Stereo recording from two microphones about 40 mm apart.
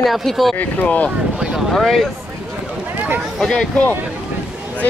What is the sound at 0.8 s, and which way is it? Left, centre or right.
Speech, left.